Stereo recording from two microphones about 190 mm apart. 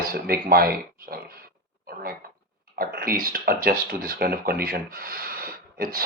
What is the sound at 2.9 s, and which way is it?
Speech, 50° right (ahead or behind).